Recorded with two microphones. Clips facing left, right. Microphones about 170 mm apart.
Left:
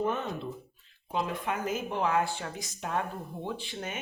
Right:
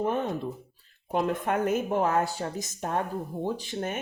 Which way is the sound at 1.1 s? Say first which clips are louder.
Right 5 dB; 55° right (ahead or behind).